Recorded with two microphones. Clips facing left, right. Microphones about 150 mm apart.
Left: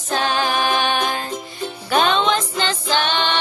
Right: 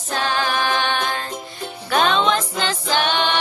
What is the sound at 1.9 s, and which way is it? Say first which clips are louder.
Music: even; centre (ahead or behind).